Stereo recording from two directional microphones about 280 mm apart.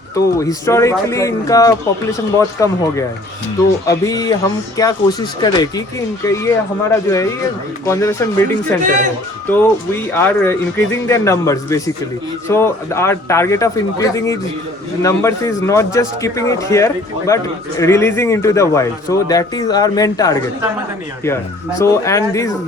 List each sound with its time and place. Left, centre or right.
0.3 s a man's voice: centre
8.8 s speech: right
9.5 s a man's voice: centre
21.8 s a man's voice: centre